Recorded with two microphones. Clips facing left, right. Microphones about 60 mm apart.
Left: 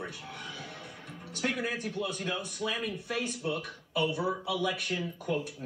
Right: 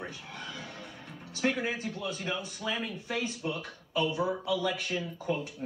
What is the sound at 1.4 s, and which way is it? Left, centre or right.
Speech, centre.